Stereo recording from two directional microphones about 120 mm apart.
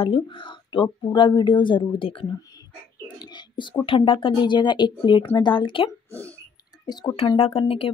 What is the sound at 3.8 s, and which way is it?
A woman's voice, 45° left (ahead or behind).